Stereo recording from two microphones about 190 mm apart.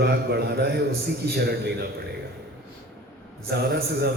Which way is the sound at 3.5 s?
60° right (ahead or behind).